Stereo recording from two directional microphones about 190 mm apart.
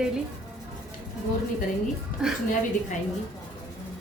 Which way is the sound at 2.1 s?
45° left (ahead or behind).